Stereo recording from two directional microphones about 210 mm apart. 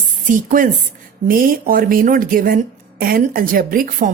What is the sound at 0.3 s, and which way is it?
A woman's voice, 40° right (ahead or behind).